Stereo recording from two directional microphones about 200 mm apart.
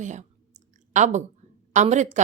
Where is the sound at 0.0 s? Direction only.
35° right (ahead or behind).